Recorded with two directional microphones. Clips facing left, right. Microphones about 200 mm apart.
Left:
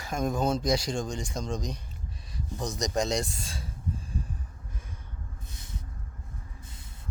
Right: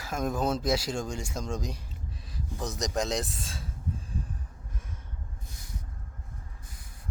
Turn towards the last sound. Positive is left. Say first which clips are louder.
# left 1 dB
turn(degrees=25)  # may be behind; listen again after turning